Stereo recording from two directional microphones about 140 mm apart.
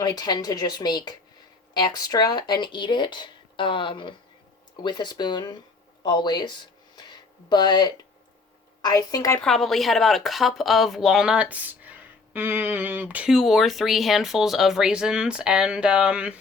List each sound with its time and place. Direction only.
0.0 s speech: 30° left (ahead or behind)
9.4 s speech: centre (ahead or behind)